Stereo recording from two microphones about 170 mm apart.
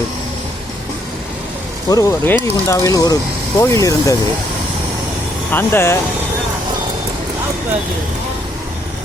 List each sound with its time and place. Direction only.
1.9 s speech: 20° left (ahead or behind)
5.5 s speech: 10° left (ahead or behind)